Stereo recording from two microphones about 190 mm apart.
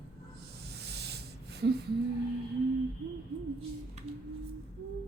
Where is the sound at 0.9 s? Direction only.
60° right (ahead or behind).